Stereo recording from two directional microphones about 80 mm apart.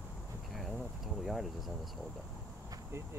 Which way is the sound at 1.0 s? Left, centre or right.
Centre.